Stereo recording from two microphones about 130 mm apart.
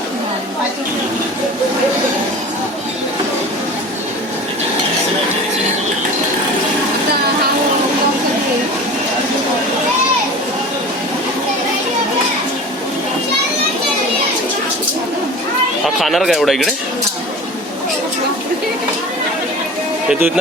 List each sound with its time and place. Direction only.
16.0 s speech: centre (ahead or behind)
20.1 s speech: 5° right (ahead or behind)